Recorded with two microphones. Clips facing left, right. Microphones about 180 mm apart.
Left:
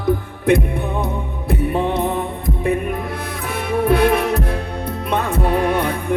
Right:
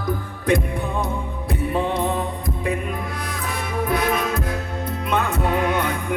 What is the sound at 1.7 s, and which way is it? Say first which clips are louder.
Music: left 1 dB; 20° left (ahead or behind).